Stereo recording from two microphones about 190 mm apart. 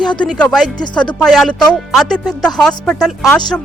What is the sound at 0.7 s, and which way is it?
Speech, 25° left (ahead or behind).